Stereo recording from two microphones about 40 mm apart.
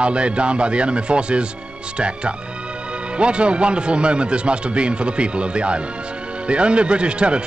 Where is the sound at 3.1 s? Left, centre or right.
Right.